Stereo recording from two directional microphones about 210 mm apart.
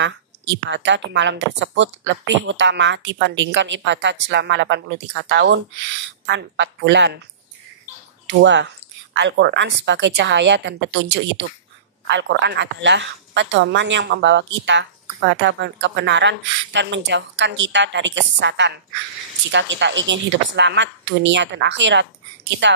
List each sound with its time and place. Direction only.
0.7 s a woman's voice: 60° right (ahead or behind)
8.3 s a woman's voice: 60° right (ahead or behind)